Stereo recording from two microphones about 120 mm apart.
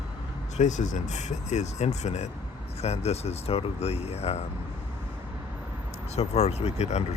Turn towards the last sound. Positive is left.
turn(degrees=65)  # may be behind; listen again after turning